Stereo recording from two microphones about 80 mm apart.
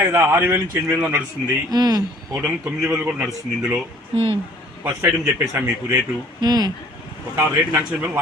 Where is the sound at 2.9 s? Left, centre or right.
Centre.